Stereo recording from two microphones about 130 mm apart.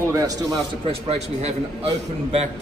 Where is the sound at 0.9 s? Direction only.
55° right (ahead or behind).